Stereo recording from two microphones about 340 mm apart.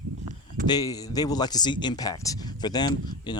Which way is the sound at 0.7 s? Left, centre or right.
Centre.